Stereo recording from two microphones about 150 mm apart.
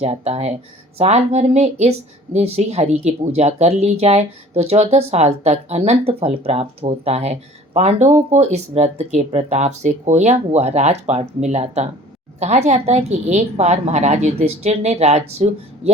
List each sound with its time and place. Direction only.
0.0 s speech: 45° right (ahead or behind)